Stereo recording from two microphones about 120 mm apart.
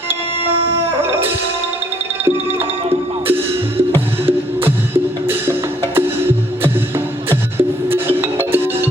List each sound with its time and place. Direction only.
2.2 s music: 20° right (ahead or behind)